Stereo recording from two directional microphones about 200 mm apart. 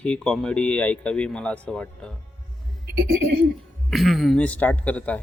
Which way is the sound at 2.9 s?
55° right (ahead or behind).